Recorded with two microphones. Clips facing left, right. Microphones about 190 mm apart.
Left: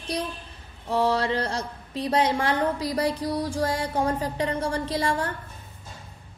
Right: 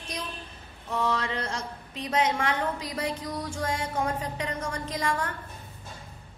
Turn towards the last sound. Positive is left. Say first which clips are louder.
# left 4 dB
turn(degrees=30)  # may be behind; listen again after turning